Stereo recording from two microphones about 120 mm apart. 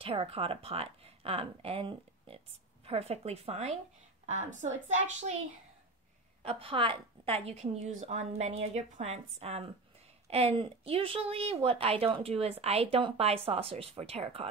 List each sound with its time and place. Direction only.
0.0 s speech: 50° right (ahead or behind)
4.3 s a woman's voice: 85° right
6.4 s a woman's voice: 50° right (ahead or behind)
10.3 s speech: 50° right (ahead or behind)